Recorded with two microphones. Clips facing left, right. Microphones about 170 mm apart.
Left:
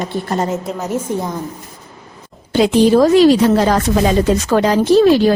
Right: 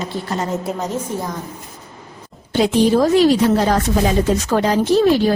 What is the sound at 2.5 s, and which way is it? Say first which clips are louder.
A woman's voice: left 3 dB; 90° left.